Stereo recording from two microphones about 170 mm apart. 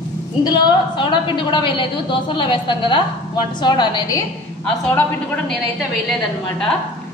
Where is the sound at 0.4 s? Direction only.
25° left (ahead or behind).